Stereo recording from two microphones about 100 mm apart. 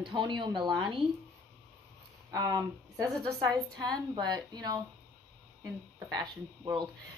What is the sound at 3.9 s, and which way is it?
Speech, 45° right (ahead or behind).